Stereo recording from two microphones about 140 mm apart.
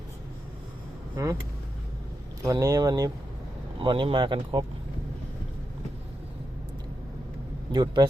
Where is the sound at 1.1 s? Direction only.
25° right (ahead or behind).